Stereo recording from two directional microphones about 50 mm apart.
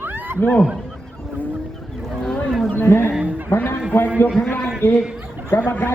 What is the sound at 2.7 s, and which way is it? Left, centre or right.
Speech, left.